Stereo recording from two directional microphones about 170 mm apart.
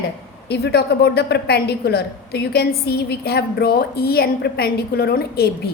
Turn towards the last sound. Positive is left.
turn(degrees=65)  # may be behind; listen again after turning